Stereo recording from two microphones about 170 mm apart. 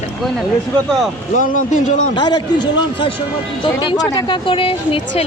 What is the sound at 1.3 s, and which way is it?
Speech, 50° left (ahead or behind).